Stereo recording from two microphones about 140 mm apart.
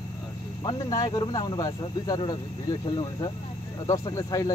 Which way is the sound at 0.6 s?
30° left (ahead or behind).